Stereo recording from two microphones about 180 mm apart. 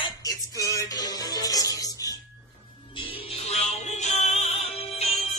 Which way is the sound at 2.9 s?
30° left (ahead or behind).